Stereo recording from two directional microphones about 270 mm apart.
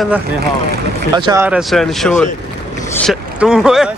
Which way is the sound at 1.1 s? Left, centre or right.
Centre.